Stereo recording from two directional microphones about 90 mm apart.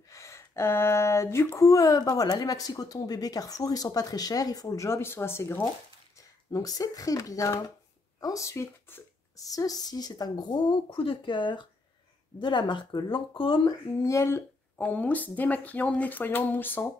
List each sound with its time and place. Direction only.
0.1 s speech: 35° left (ahead or behind)
6.1 s speech: 40° left (ahead or behind)
9.4 s speech: 40° left (ahead or behind)
10.9 s speech: 90° left; by 13.6 s 65° left (ahead or behind)
13.7 s speech: 35° left (ahead or behind)
14.9 s speech: 20° left (ahead or behind)